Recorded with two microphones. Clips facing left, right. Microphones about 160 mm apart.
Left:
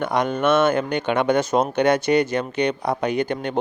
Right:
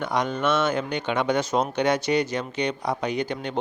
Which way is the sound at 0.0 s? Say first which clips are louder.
Left 4 dB; 55° left (ahead or behind).